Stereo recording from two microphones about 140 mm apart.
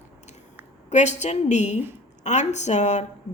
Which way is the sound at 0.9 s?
55° left (ahead or behind).